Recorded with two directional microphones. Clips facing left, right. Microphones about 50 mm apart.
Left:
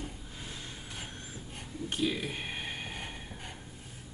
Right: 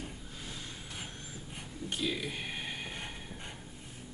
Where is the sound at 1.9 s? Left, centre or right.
Centre.